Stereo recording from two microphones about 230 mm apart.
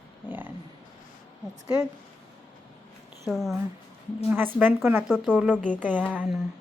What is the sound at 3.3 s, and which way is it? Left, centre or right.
A woman's voice, centre.